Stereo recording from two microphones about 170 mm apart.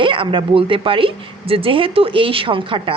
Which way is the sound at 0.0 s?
30° right (ahead or behind).